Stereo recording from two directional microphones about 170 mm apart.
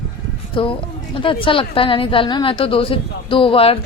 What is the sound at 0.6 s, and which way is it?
A woman's voice, 30° left (ahead or behind).